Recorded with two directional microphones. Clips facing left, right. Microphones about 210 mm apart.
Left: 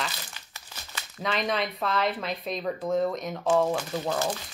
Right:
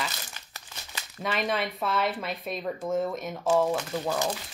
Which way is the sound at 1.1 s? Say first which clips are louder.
Left 1 dB; 5° right (ahead or behind).